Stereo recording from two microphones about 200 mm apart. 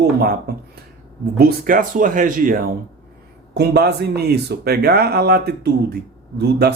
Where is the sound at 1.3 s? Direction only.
50° right (ahead or behind).